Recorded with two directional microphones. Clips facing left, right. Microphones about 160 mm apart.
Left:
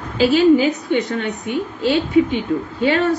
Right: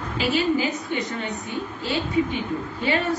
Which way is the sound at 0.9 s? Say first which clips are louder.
Left 8 dB; 80° left.